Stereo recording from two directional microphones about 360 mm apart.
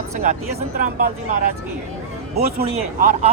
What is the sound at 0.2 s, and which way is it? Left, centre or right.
Speech, right.